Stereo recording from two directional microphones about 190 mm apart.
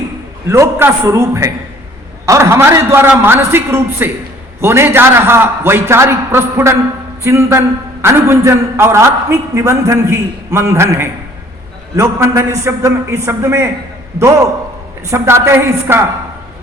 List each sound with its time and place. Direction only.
0.4 s a man's voice: 15° right (ahead or behind)
15.1 s a man's voice: 15° right (ahead or behind)